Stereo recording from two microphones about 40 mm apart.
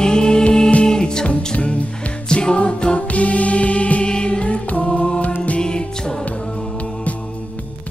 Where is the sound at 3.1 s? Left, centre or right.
Left.